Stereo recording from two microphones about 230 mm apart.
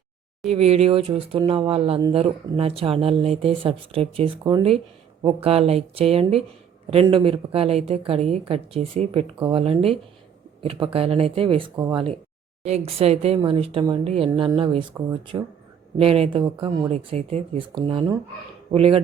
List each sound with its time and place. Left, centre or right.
0.4 s speech: right